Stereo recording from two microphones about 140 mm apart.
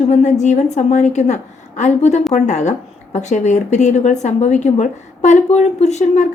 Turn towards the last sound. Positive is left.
turn(degrees=60)  # may be behind; listen again after turning